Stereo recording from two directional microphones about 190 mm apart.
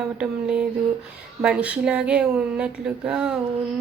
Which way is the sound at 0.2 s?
5° right (ahead or behind).